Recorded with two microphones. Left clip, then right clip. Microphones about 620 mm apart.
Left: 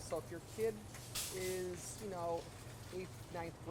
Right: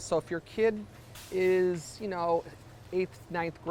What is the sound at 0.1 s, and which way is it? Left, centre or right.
Speech, right.